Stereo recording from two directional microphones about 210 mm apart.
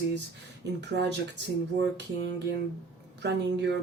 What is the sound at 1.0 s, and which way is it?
Speech, 55° right (ahead or behind).